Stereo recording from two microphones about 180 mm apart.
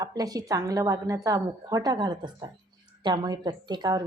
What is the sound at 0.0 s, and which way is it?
Speech, 20° right (ahead or behind).